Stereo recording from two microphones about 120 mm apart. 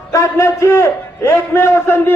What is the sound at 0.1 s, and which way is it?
A man's voice, 25° left (ahead or behind).